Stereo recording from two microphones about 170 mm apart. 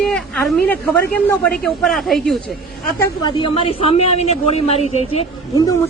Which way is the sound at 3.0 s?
30° left (ahead or behind).